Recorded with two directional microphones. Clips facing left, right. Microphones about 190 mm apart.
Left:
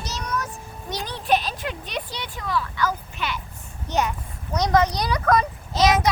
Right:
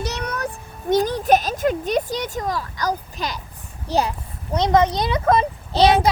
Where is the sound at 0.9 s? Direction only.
45° right (ahead or behind).